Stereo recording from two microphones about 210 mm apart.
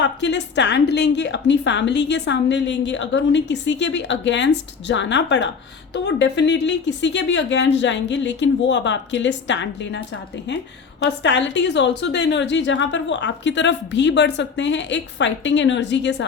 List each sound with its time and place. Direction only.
0.0 s a woman's voice: 55° left (ahead or behind)
11.0 s a woman's voice: 55° left (ahead or behind)